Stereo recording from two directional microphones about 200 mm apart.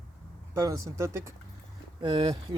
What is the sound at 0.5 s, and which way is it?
Speech, 15° right (ahead or behind).